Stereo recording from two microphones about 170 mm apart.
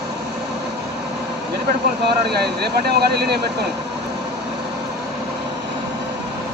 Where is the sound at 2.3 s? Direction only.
70° right (ahead or behind).